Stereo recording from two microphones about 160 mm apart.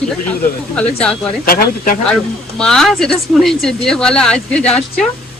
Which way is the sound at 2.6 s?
5° left (ahead or behind).